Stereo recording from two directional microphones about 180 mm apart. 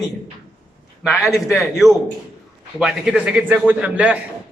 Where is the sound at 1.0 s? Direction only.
5° right (ahead or behind).